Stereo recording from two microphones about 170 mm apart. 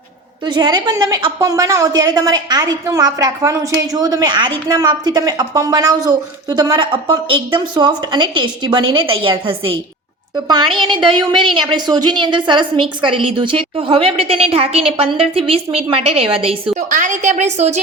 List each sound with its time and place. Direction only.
0.4 s a woman's voice: 25° right (ahead or behind)
16.9 s a woman's voice: 45° right (ahead or behind)